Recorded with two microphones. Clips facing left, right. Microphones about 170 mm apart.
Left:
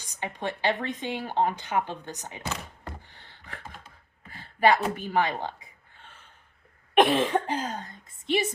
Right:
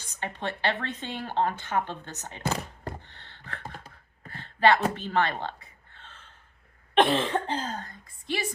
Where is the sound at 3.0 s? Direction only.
10° left (ahead or behind).